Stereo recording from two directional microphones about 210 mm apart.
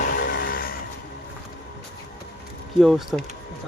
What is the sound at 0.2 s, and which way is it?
Vehicle, 50° left (ahead or behind).